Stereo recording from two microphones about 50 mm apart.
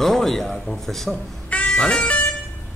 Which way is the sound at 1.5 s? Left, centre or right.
Left.